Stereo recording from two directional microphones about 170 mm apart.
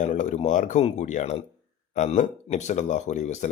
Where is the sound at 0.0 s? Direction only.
45° left (ahead or behind).